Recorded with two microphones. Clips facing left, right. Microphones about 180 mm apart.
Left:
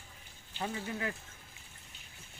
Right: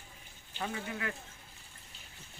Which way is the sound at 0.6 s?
25° left (ahead or behind).